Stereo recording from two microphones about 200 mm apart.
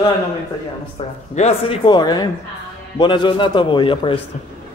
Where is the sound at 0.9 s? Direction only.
30° left (ahead or behind).